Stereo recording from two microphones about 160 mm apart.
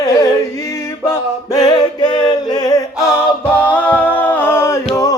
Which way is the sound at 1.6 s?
25° left (ahead or behind).